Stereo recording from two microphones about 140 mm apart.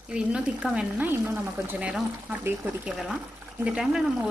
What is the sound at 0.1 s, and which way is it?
Speech, 5° right (ahead or behind).